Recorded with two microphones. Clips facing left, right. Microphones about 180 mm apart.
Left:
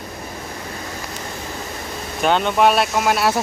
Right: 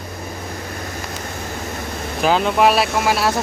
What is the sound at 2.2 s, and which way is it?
Speech, centre (ahead or behind).